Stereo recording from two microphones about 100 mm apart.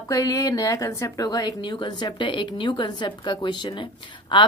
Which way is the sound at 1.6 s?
50° left (ahead or behind).